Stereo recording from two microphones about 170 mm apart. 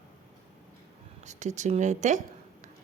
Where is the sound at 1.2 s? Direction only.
45° right (ahead or behind).